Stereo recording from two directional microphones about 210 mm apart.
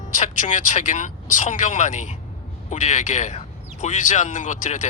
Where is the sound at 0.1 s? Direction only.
35° left (ahead or behind).